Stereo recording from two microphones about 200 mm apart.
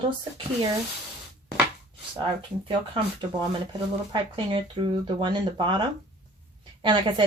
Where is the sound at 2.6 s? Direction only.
25° right (ahead or behind).